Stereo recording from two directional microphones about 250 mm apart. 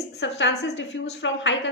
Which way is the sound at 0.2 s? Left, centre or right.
Left.